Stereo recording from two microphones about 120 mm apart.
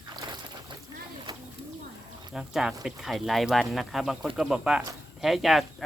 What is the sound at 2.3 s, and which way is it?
Speech, 5° right (ahead or behind).